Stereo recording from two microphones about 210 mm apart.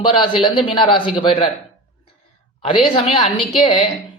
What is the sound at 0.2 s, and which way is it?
Speech, 25° left (ahead or behind).